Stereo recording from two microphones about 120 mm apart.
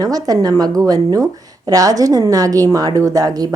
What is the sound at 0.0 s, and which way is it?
A woman's voice, 30° right (ahead or behind).